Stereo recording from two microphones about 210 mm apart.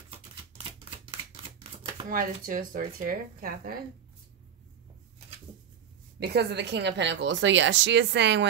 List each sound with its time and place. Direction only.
0.8 s typewriter: 25° right (ahead or behind)
2.0 s speech: 40° right (ahead or behind)
6.1 s a woman's voice: 50° right (ahead or behind)